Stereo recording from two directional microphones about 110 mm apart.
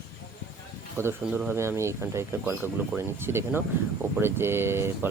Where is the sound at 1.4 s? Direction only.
25° right (ahead or behind).